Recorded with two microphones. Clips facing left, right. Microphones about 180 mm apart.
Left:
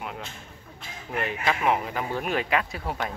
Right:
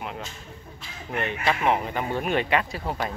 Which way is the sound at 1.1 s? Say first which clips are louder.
Right 1 dB; 5° left (ahead or behind).